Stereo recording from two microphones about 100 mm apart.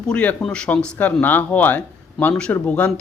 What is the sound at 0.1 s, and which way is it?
Speech, 10° left (ahead or behind).